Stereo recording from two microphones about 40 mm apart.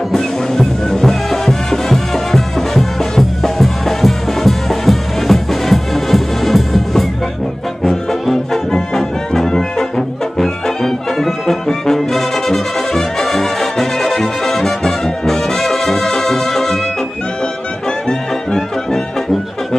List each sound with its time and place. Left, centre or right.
0.1 s music: centre
7.8 s brass instrument: centre
18.0 s music: centre